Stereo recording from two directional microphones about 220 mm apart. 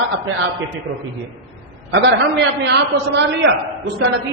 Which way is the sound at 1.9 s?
55° right (ahead or behind).